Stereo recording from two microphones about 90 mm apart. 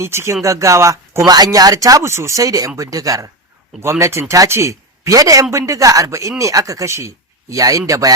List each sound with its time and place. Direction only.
0.0 s speech: 30° right (ahead or behind)